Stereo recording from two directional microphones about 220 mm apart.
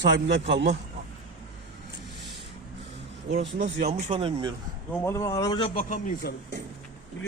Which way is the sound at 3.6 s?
30° right (ahead or behind).